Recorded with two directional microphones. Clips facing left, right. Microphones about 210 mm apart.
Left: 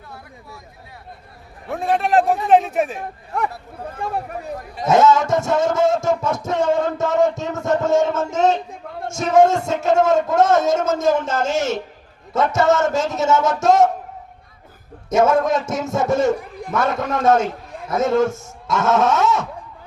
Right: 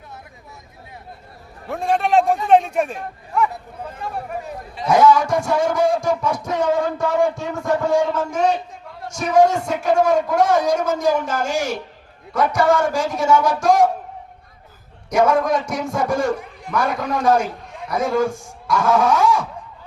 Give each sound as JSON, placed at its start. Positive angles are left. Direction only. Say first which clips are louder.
{"t": 1.6, "sound": "a man's voice", "louder": "even", "side_deg": 0}
{"t": 4.9, "sound": "a man's voice", "louder": "even", "side_deg": 25}
{"t": 15.1, "sound": "a man's voice", "louder": "left 1 dB", "side_deg": 25}